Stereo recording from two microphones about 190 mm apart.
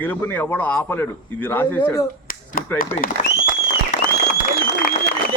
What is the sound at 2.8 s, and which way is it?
Speech, 50° left (ahead or behind).